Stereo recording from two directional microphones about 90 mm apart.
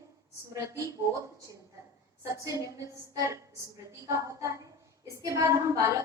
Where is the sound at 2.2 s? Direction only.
35° right (ahead or behind).